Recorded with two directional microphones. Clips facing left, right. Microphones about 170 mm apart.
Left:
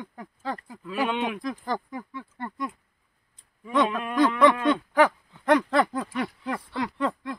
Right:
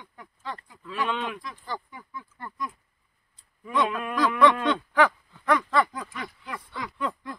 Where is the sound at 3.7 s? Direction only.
20° left (ahead or behind).